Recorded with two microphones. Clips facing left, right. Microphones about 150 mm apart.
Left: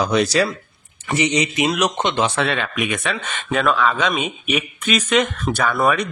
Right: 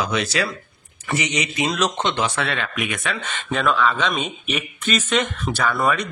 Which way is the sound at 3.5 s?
5° left (ahead or behind).